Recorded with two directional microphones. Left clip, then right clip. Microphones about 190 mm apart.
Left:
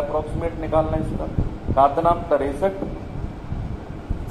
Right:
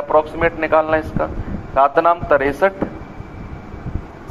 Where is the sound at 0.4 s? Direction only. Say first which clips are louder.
Right 7 dB; 30° right (ahead or behind).